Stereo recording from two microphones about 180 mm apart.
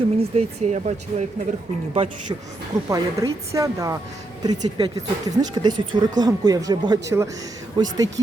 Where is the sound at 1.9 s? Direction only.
30° right (ahead or behind).